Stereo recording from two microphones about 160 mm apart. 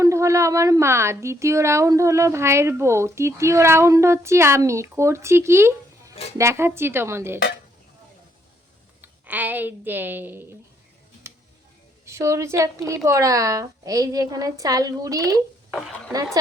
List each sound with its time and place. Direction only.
0.0 s speech: 20° right (ahead or behind)
9.0 s a woman's voice: 10° right (ahead or behind)
11.3 s tick-tock: 15° right (ahead or behind)
12.0 s a woman's voice: 20° right (ahead or behind)